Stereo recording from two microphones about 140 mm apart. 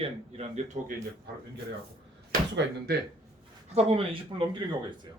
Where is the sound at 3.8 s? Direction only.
45° right (ahead or behind).